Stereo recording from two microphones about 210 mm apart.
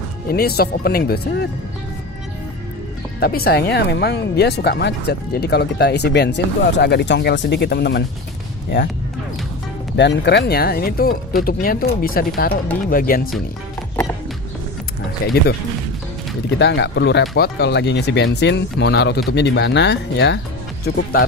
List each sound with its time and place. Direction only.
0.3 s speech: 45° left (ahead or behind)
3.2 s speech: 45° left (ahead or behind)
9.9 s speech: 55° left (ahead or behind)
16.4 s speech: 55° left (ahead or behind)